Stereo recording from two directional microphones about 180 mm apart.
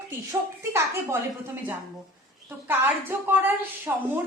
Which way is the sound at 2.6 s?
10° right (ahead or behind).